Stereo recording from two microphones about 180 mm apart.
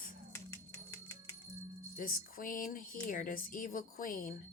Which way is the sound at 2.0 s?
50° left (ahead or behind).